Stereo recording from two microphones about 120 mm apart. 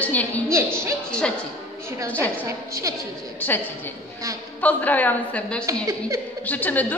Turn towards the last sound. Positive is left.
turn(degrees=15)  # may be behind; listen again after turning